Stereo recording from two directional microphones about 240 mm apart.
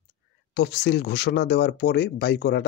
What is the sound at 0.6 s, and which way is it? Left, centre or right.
Speech, left.